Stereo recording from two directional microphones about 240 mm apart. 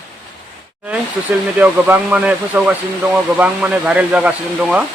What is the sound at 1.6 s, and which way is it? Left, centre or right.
Speech, centre.